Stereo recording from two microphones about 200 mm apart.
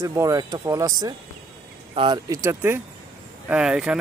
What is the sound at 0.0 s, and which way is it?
Speech, 15° right (ahead or behind).